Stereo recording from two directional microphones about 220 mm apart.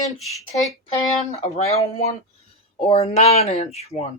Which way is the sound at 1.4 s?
30° left (ahead or behind).